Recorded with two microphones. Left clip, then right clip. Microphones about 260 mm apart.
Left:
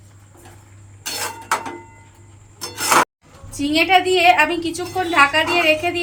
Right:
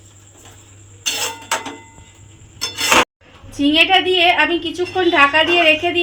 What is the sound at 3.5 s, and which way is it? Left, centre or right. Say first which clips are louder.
A woman's voice: right 2 dB; right.